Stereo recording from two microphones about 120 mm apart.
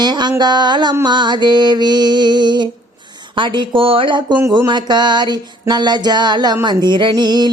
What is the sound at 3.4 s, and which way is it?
Speech, 40° right (ahead or behind).